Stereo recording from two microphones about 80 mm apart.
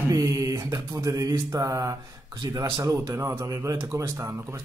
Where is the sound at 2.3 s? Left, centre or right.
Right.